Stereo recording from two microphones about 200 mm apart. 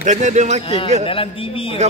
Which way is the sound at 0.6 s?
30° left (ahead or behind).